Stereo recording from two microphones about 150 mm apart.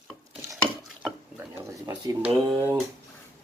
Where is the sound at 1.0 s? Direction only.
15° right (ahead or behind).